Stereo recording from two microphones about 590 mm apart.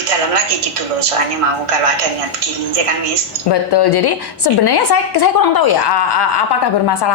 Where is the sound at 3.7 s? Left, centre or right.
Left.